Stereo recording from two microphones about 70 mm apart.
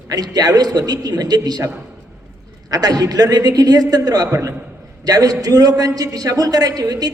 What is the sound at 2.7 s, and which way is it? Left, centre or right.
A man's voice, right.